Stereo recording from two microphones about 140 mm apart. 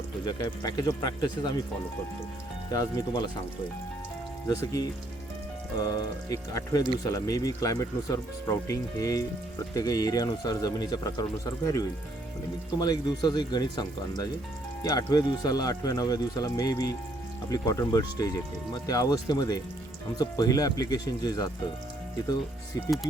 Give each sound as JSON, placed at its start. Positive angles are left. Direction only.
{"t": 0.3, "sound": "speech", "side_deg": 30}
{"t": 2.6, "sound": "speech", "side_deg": 30}
{"t": 4.4, "sound": "speech", "side_deg": 25}